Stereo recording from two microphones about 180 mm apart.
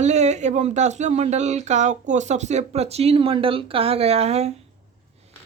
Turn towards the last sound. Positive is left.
turn(degrees=-35)  # may be behind; listen again after turning